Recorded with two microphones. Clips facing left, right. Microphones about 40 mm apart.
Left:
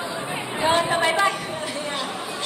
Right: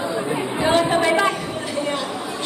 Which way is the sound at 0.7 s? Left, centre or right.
Left.